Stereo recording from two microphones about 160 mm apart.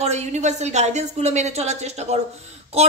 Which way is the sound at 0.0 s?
45° right (ahead or behind).